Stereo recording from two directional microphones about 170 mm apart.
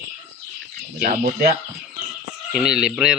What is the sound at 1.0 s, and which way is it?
Speech, 45° right (ahead or behind).